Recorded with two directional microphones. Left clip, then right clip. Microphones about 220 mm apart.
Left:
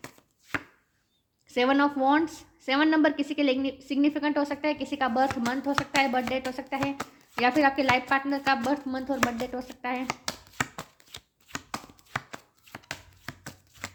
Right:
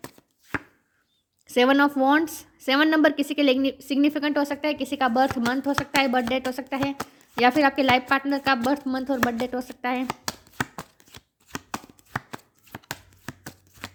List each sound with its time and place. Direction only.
1.5 s a woman's voice: 40° right (ahead or behind)
6.7 s speech: 15° right (ahead or behind)
7.4 s speech: 45° right (ahead or behind)
10.6 s chopping: 10° right (ahead or behind)